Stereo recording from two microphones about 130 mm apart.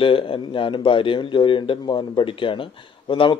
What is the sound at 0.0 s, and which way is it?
A man's voice, 40° left (ahead or behind).